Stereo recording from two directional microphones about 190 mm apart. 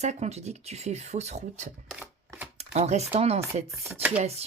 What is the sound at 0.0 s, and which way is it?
Speech, 35° right (ahead or behind).